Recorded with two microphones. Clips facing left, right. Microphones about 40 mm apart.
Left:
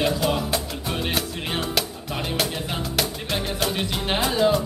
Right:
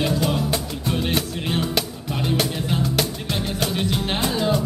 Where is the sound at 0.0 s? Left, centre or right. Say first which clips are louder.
Even; centre.